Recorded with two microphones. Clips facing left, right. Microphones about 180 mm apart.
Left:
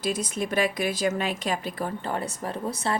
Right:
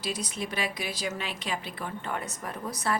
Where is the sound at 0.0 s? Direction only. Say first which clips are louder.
Left 6 dB; 50° left (ahead or behind).